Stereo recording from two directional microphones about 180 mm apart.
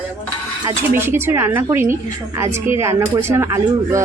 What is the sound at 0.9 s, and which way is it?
A woman's voice, 15° right (ahead or behind).